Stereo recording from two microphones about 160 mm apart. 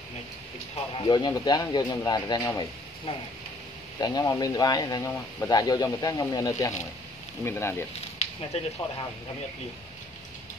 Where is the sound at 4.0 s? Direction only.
25° left (ahead or behind).